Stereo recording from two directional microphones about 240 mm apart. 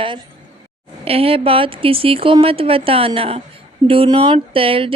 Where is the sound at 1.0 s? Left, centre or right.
Right.